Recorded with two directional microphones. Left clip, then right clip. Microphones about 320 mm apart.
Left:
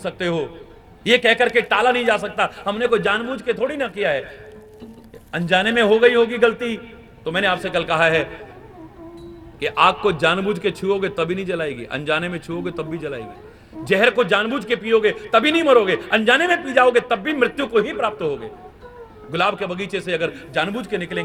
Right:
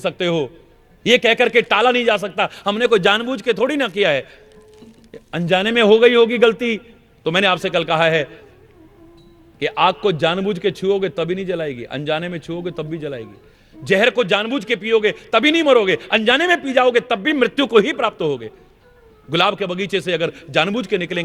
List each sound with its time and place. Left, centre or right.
0.0 s a man's voice: right
5.3 s a man's voice: right
9.6 s a man's voice: right